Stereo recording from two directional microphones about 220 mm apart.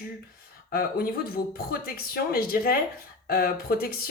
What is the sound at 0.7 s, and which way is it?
A woman's voice, 45° left (ahead or behind).